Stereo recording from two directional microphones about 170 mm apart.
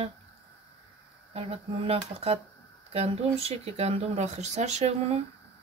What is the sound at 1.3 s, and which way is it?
Speech, 35° right (ahead or behind).